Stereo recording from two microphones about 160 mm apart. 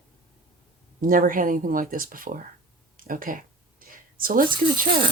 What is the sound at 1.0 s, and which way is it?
Speech, 60° right (ahead or behind).